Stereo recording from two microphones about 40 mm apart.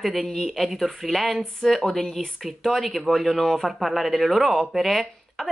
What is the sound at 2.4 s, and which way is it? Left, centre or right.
Speech, centre.